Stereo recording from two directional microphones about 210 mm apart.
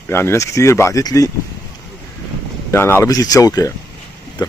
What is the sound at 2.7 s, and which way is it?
Speech, 10° left (ahead or behind).